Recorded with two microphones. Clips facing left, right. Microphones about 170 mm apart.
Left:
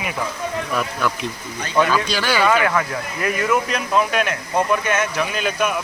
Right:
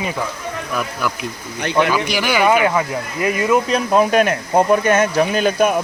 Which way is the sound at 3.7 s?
45° right (ahead or behind).